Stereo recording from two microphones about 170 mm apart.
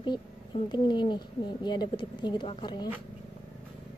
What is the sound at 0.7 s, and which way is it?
Speech, 25° left (ahead or behind).